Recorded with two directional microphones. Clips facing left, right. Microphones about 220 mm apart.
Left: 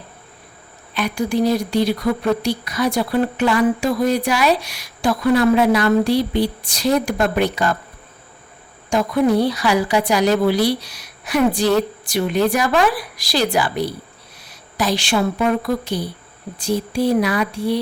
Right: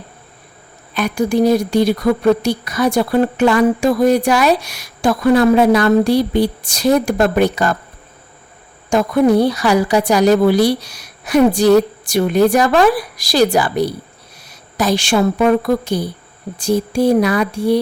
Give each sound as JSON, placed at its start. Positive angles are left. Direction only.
{"t": 0.9, "sound": "speech", "side_deg": -45}
{"t": 8.9, "sound": "speech", "side_deg": -50}